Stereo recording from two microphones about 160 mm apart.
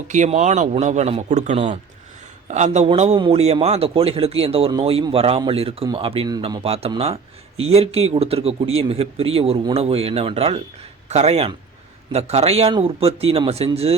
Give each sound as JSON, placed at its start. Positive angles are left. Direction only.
{"t": 0.1, "sound": "a man's voice", "side_deg": -50}